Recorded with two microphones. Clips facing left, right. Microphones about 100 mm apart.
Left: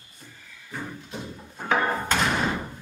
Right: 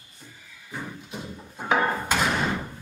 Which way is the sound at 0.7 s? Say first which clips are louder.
Even; 10° right (ahead or behind).